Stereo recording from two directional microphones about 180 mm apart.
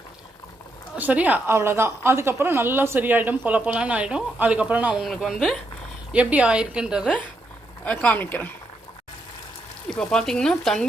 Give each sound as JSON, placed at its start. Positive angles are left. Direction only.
{"t": 0.9, "sound": "a woman's voice", "side_deg": -10}
{"t": 7.9, "sound": "speech", "side_deg": 10}
{"t": 9.9, "sound": "a woman's voice", "side_deg": 5}